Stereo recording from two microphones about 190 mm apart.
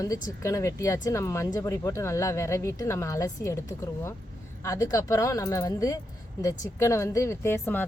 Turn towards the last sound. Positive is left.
turn(degrees=10)  # may be behind; listen again after turning